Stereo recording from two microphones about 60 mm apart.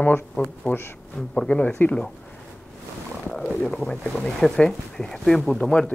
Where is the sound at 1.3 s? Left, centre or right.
Centre.